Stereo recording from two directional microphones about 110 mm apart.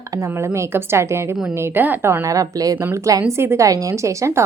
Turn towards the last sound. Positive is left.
turn(degrees=-25)  # may be behind; listen again after turning